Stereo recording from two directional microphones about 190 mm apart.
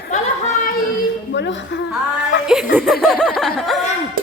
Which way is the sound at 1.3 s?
70° left (ahead or behind).